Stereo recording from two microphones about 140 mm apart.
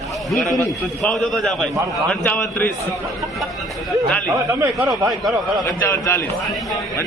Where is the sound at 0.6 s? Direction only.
5° left (ahead or behind).